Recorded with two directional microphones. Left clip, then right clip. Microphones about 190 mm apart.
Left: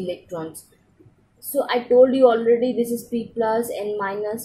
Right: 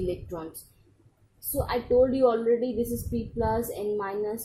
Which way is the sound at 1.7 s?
20° right (ahead or behind).